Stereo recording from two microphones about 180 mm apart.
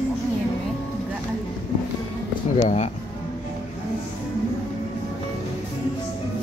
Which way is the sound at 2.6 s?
40° left (ahead or behind).